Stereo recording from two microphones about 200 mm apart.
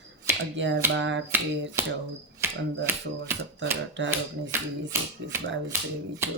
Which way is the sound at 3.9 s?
65° right (ahead or behind).